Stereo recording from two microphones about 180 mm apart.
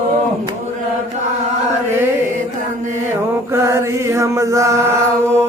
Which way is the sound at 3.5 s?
15° right (ahead or behind).